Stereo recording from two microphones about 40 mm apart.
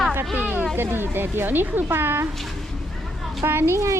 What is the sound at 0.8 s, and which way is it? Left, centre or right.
Speech, right.